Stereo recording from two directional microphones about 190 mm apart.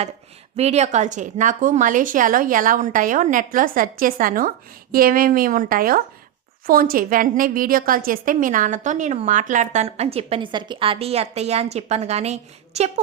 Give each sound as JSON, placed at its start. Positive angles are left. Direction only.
{"t": 0.5, "sound": "a woman's voice", "side_deg": -35}